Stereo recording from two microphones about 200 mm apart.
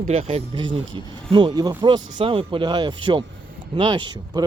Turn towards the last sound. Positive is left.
turn(degrees=-25)  # may be behind; listen again after turning